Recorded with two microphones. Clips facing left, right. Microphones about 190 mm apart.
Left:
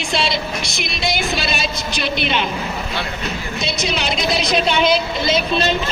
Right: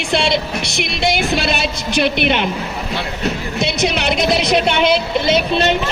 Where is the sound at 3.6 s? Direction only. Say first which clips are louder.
Right 5 dB; 65° right (ahead or behind).